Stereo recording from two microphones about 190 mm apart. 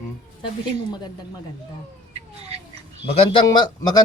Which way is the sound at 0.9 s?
20° left (ahead or behind).